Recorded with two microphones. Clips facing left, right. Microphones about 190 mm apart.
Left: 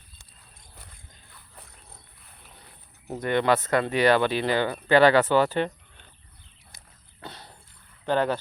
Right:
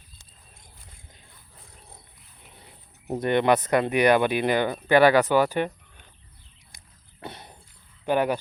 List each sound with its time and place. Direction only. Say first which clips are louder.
2.4 s speech: right 3 dB; 20° right (ahead or behind)
6.7 s a sound: right 2 dB; 20° right (ahead or behind)
8.0 s speech: right 1 dB; 10° right (ahead or behind)